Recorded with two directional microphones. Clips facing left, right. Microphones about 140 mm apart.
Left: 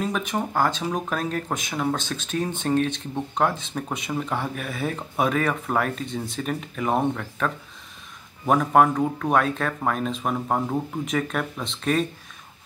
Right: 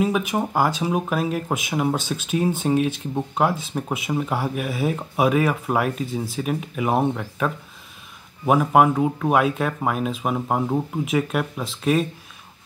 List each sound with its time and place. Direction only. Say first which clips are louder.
0.0 s speech: right 4 dB; 5° right (ahead or behind)